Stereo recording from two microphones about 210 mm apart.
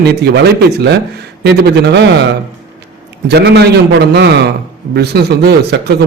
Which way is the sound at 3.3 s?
50° right (ahead or behind).